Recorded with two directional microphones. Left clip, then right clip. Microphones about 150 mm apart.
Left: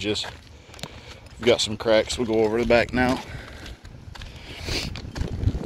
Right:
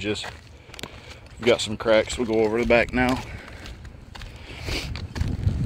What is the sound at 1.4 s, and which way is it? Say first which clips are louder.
Speech: even; 10° left (ahead or behind).